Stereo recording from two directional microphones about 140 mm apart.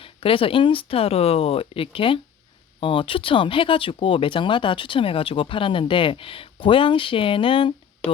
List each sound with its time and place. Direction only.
0.0 s speech: 40° left (ahead or behind)